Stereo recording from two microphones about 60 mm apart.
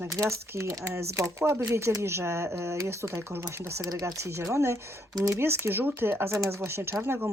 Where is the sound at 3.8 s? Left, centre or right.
Right.